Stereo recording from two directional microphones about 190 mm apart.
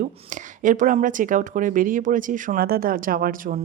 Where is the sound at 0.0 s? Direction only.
45° right (ahead or behind).